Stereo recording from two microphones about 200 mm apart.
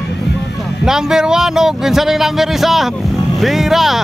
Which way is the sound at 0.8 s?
5° right (ahead or behind).